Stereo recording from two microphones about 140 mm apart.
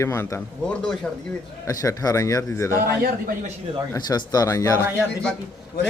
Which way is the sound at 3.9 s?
30° left (ahead or behind).